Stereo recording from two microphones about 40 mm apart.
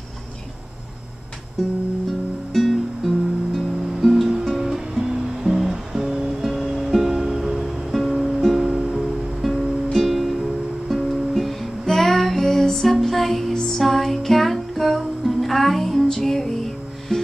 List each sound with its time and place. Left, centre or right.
1.6 s music: centre